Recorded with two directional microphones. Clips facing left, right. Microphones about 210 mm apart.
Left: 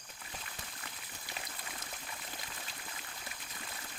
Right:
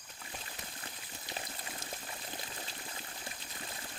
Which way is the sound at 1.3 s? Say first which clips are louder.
Right 3 dB; 25° right (ahead or behind).